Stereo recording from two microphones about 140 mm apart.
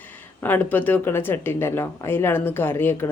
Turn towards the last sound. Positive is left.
turn(degrees=15)  # may be behind; listen again after turning